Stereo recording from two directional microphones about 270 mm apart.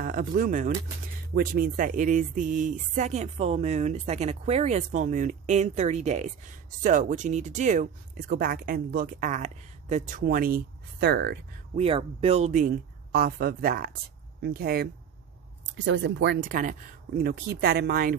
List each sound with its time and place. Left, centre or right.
0.0 s speech: right
11.7 s speech: right